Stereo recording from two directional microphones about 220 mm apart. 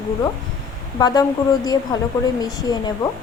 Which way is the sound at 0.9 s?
15° left (ahead or behind).